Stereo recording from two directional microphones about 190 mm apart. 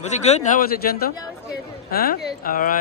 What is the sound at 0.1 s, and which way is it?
Speech, 35° left (ahead or behind).